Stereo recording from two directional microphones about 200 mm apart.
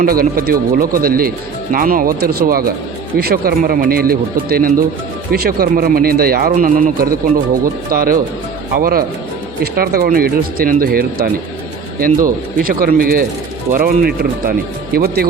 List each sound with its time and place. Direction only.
0.0 s speech: 45° right (ahead or behind)